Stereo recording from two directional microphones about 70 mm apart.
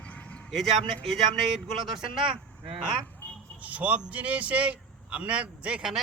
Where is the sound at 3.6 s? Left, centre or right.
Centre.